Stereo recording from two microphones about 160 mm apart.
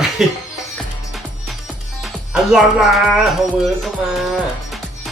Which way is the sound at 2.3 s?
5° right (ahead or behind).